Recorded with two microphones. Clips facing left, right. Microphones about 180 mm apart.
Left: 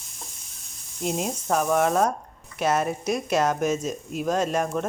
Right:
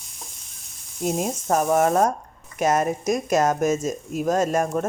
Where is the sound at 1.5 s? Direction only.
35° right (ahead or behind).